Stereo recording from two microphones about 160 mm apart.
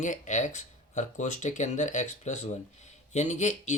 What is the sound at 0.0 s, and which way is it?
Speech, 50° left (ahead or behind).